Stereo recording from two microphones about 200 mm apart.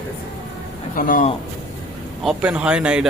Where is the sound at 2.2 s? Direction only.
5° right (ahead or behind).